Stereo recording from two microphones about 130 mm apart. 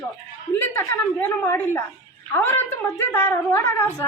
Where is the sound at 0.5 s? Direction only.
20° left (ahead or behind).